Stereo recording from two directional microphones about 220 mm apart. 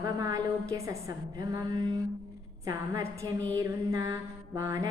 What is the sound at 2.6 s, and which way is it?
A woman's voice, 15° right (ahead or behind).